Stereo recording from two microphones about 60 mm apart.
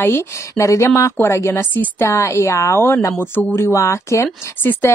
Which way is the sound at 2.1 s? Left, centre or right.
Left.